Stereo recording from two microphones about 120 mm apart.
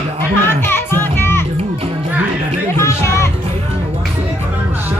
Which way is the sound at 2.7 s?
25° left (ahead or behind).